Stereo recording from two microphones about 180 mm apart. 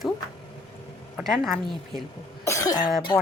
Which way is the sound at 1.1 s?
Centre (ahead or behind).